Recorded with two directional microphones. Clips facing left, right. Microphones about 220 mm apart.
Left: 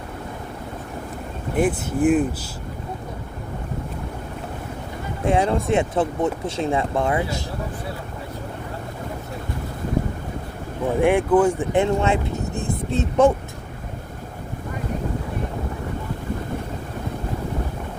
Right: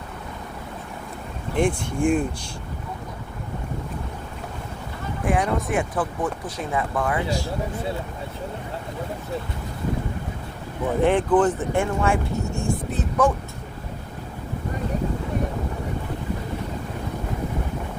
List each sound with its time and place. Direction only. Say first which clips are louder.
1.5 s speech: left 2 dB; 5° left (ahead or behind)
5.2 s speech: left 3 dB; 25° left (ahead or behind)
11.0 s speech: left 2 dB; 10° left (ahead or behind); by 13.3 s 25° left (ahead or behind)